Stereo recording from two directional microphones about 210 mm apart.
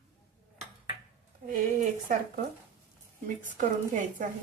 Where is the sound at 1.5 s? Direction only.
40° right (ahead or behind).